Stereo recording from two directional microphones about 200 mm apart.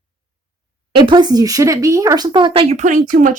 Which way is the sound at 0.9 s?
20° right (ahead or behind).